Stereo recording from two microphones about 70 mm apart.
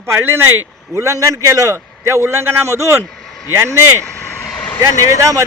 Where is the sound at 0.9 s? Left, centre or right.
Right.